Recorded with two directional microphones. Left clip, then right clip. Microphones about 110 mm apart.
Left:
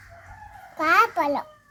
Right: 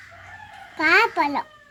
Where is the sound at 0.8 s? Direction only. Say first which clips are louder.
Right 2 dB; 35° left (ahead or behind).